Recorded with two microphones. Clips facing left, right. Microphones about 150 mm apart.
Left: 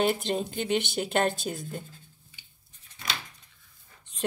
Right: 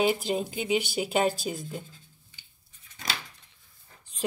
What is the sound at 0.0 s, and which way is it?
A woman's voice, 5° right (ahead or behind).